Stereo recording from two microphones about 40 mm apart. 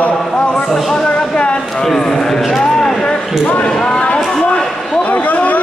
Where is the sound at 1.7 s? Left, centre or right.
Centre.